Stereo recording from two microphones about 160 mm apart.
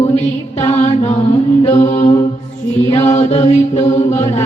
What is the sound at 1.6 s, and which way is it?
Chant, 45° left (ahead or behind).